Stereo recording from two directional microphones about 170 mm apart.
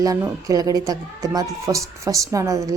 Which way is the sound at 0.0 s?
20° right (ahead or behind).